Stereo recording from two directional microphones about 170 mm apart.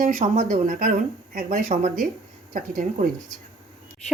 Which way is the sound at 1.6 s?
40° right (ahead or behind).